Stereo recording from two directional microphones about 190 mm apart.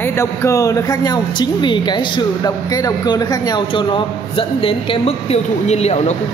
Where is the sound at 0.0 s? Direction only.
15° left (ahead or behind).